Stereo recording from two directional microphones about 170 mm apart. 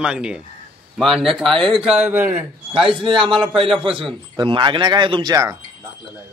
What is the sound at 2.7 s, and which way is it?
A man's voice, 30° right (ahead or behind).